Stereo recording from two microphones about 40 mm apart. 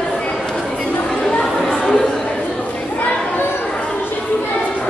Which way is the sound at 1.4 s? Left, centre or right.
Centre.